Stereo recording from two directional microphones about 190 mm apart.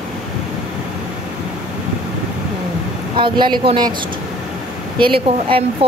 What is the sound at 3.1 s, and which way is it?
Speech, 25° right (ahead or behind).